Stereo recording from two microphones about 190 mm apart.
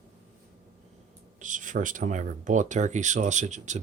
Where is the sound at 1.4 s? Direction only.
40° right (ahead or behind).